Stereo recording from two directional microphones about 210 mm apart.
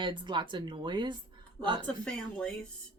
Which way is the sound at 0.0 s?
20° right (ahead or behind).